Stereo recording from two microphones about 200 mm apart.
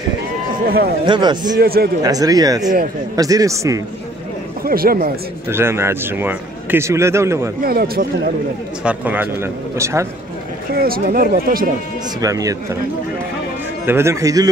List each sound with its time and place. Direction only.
1.0 s a man's voice: 20° right (ahead or behind)
1.6 s speech: 50° right (ahead or behind)
2.0 s a man's voice: 20° right (ahead or behind)
4.6 s speech: 45° right (ahead or behind)
5.5 s a man's voice: 10° right (ahead or behind)
7.6 s speech: 50° right (ahead or behind)
8.8 s a man's voice: 10° right (ahead or behind)
10.7 s speech: 50° right (ahead or behind)
12.2 s a man's voice: 15° right (ahead or behind)
13.8 s a man's voice: 10° right (ahead or behind)